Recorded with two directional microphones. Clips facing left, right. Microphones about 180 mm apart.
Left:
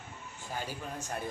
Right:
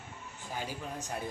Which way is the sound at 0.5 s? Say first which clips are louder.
Even; 15° right (ahead or behind).